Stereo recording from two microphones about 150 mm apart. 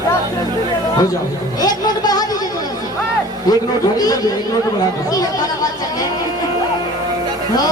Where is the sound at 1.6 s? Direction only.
25° left (ahead or behind).